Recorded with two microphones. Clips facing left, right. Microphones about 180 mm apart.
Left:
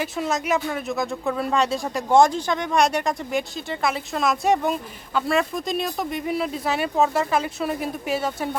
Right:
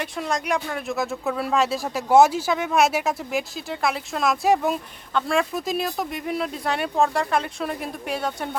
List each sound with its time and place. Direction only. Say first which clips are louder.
0.0 s speech: left 2 dB; 5° left (ahead or behind)